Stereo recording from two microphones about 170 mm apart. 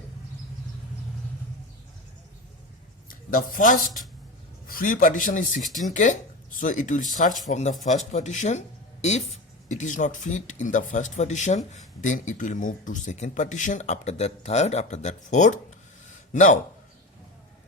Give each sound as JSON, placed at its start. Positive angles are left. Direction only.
{"t": 3.1, "sound": "speech", "side_deg": 55}